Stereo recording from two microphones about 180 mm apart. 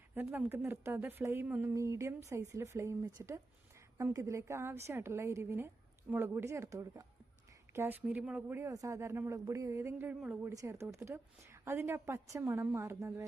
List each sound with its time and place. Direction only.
0.1 s a woman's voice: 10° right (ahead or behind)